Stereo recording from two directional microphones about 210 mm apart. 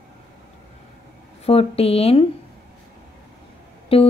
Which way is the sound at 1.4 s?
30° left (ahead or behind).